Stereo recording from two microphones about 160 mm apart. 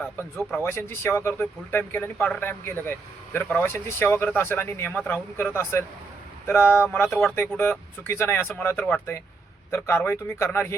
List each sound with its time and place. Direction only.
0.6 s speech: 15° left (ahead or behind)